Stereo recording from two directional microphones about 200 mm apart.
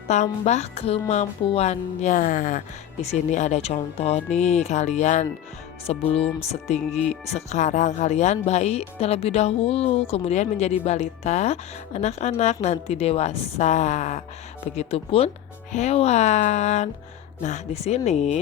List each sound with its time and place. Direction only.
0.1 s music: 35° left (ahead or behind)
14.8 s speech: 30° left (ahead or behind)
15.7 s music: 30° left (ahead or behind)